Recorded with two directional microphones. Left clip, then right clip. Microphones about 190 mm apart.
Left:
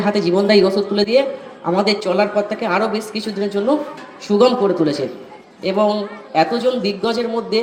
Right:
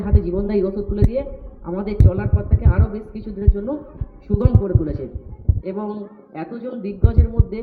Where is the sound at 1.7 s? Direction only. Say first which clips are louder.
Left 9 dB; 45° left (ahead or behind).